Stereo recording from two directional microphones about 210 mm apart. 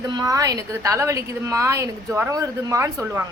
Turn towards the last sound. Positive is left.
turn(degrees=-10)  # may be behind; listen again after turning